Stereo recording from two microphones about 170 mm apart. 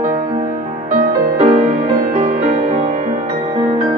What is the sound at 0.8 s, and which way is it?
Music, 50° right (ahead or behind).